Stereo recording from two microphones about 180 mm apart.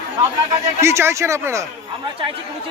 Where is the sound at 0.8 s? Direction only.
15° right (ahead or behind).